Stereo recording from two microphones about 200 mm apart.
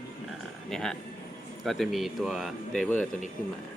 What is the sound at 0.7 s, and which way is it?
Speech, centre (ahead or behind).